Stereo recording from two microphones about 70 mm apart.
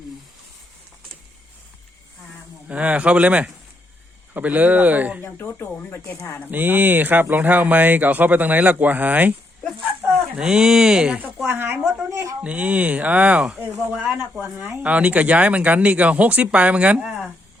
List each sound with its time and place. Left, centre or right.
2.6 s speech: centre
5.2 s speech: left
6.5 s speech: right
10.3 s speech: centre
11.4 s speech: right
12.1 s speech: right
12.4 s speech: centre